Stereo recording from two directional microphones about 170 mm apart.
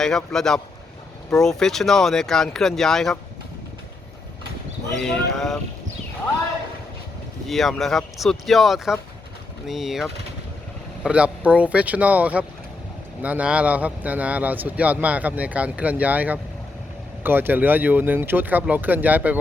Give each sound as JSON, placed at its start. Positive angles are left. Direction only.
{"t": 0.0, "sound": "speech", "side_deg": 5}
{"t": 4.9, "sound": "speech", "side_deg": 5}
{"t": 7.4, "sound": "speech", "side_deg": 0}